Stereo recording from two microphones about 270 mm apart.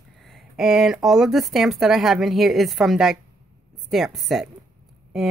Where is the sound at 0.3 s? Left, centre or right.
Centre.